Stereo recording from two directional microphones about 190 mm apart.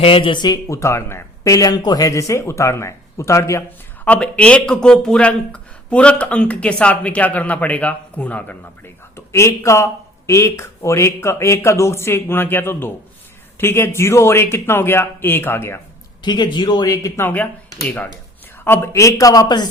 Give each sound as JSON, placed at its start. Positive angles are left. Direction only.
{"t": 0.0, "sound": "speech", "side_deg": 30}
{"t": 16.2, "sound": "speech", "side_deg": 25}